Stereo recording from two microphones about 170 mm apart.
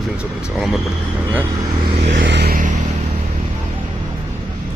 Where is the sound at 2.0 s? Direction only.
90° right; by 2.7 s 55° right (ahead or behind).